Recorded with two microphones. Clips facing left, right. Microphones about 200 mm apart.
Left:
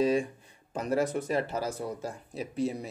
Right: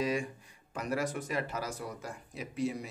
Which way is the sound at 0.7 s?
25° left (ahead or behind).